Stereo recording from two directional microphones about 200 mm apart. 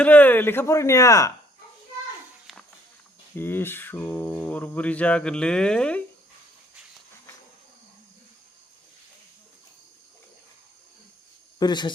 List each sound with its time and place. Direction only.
0.0 s mantra: 10° left (ahead or behind)
2.5 s a sound: centre (ahead or behind)
3.3 s mantra: 10° left (ahead or behind)
11.6 s speech: 20° left (ahead or behind)